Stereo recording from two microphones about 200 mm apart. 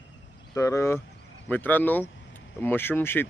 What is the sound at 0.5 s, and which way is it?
Speech, 15° left (ahead or behind).